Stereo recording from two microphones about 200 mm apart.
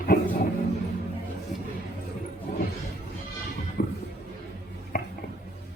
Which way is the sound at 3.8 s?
45° left (ahead or behind).